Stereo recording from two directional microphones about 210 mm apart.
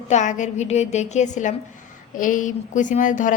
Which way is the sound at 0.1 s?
35° left (ahead or behind).